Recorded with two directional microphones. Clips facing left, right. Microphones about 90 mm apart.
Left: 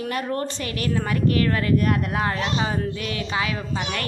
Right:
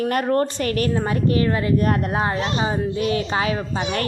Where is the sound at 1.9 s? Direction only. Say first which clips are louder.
Right 2 dB; 35° right (ahead or behind).